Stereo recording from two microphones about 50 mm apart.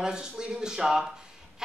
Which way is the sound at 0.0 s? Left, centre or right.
Centre.